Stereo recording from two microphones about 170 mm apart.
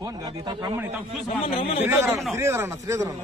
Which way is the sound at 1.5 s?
35° left (ahead or behind).